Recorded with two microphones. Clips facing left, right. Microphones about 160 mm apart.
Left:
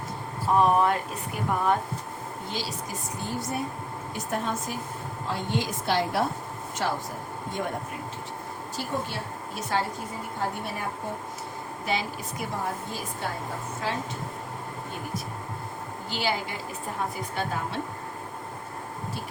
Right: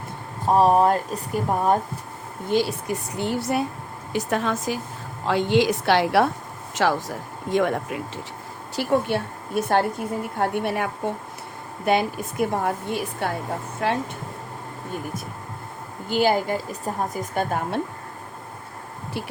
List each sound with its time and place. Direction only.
0.4 s speech: 35° right (ahead or behind)
2.5 s a woman's voice: 55° right (ahead or behind); by 3.7 s 75° right (ahead or behind)
4.1 s a woman's voice: 90° right
6.8 s a woman's voice: 90° right
8.7 s a woman's voice: 70° right (ahead or behind)
11.9 s a woman's voice: 55° right (ahead or behind)
16.0 s a woman's voice: 50° right (ahead or behind)